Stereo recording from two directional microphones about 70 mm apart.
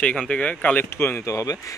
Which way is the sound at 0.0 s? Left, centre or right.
Centre.